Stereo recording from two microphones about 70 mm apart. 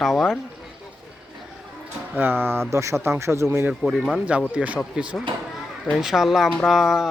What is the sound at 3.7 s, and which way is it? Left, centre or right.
Speech, centre.